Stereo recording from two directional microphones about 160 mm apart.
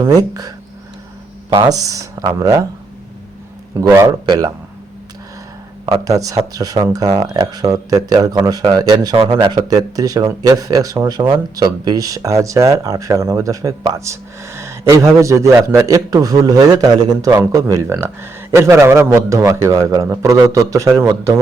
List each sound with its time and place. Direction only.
0.0 s a man's voice: 25° right (ahead or behind)
3.8 s a man's voice: 20° right (ahead or behind)
5.8 s a man's voice: 25° right (ahead or behind)